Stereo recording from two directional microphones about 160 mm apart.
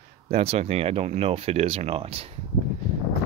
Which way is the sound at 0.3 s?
40° right (ahead or behind).